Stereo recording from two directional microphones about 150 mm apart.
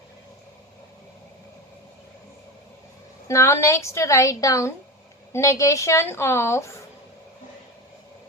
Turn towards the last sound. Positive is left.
turn(degrees=20)  # may be behind; listen again after turning